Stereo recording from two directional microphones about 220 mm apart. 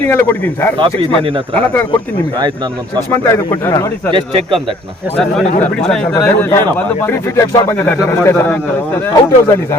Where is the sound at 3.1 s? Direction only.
10° left (ahead or behind).